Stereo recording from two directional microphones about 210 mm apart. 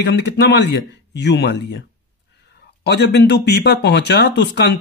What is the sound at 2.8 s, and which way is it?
Speech, 50° left (ahead or behind).